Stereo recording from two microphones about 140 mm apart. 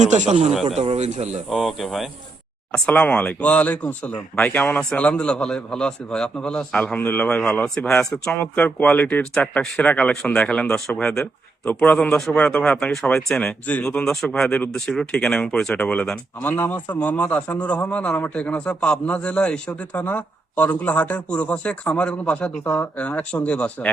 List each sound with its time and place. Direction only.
0.1 s speech: 55° right (ahead or behind)
1.5 s speech: centre (ahead or behind)
11.1 s speech: 15° left (ahead or behind)